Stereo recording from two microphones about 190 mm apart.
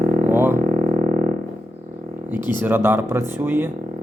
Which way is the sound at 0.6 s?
40° right (ahead or behind).